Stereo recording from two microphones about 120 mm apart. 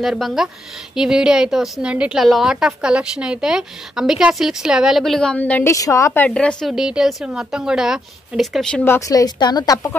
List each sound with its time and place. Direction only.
0.0 s a woman's voice: centre (ahead or behind); by 6.2 s 25° left (ahead or behind)
6.2 s a woman's voice: 10° left (ahead or behind)
6.7 s a woman's voice: 5° right (ahead or behind)
8.8 s a woman's voice: 20° left (ahead or behind)
9.1 s a woman's voice: 35° left (ahead or behind)